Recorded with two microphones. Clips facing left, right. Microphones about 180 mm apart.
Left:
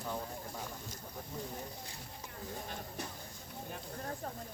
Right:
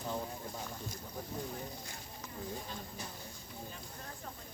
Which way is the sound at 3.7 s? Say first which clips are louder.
Left 6 dB; 50° left (ahead or behind).